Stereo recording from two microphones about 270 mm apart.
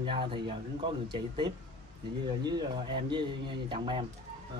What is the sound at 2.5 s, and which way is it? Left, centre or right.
Speech, centre.